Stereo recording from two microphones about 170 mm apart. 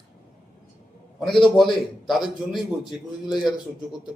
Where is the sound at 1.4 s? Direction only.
Centre (ahead or behind).